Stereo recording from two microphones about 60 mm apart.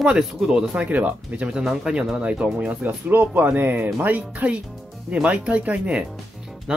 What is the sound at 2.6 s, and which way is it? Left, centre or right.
Speech, right.